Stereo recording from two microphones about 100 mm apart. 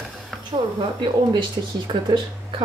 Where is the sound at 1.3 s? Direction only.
55° right (ahead or behind).